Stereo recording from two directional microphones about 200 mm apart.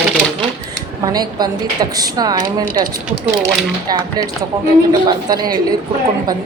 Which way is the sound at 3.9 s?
20° right (ahead or behind).